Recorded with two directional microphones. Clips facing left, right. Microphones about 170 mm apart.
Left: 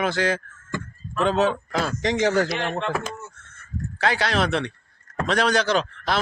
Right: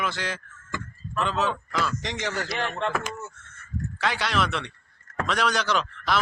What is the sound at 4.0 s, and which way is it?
A man's voice, 35° left (ahead or behind).